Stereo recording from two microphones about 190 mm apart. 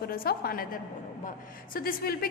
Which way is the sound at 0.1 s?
50° left (ahead or behind).